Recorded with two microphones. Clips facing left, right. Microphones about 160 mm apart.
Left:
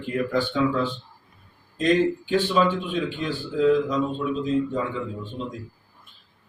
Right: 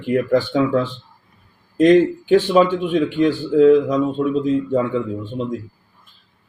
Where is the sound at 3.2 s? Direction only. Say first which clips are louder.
Right 12 dB; 75° right (ahead or behind).